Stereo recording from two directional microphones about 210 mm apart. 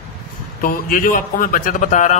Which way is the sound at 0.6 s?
40° left (ahead or behind).